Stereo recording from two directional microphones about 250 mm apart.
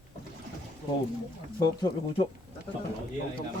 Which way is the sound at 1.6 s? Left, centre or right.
Centre.